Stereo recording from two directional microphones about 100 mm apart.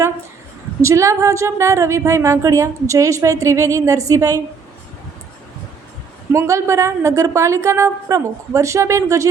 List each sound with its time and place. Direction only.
0.8 s a woman's voice: 30° right (ahead or behind)
6.3 s a woman's voice: 30° right (ahead or behind)